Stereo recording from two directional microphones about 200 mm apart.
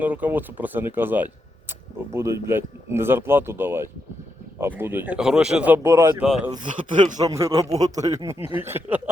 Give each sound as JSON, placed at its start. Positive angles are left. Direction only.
{"t": 0.0, "sound": "a man's voice", "side_deg": -10}
{"t": 6.5, "sound": "a man's voice", "side_deg": -25}